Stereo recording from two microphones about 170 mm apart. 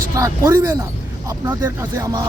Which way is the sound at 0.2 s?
20° right (ahead or behind).